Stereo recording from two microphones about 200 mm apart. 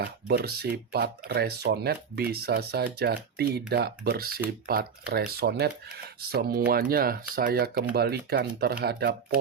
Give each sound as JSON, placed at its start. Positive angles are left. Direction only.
{"t": 0.0, "sound": "speech", "side_deg": -50}